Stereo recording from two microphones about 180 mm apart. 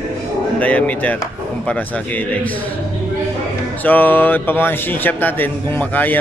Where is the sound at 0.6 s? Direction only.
10° left (ahead or behind).